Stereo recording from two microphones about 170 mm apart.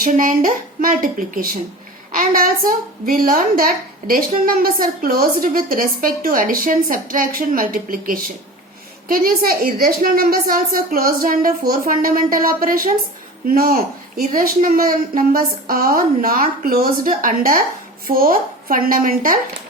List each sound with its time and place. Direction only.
0.0 s a woman's voice: 55° right (ahead or behind)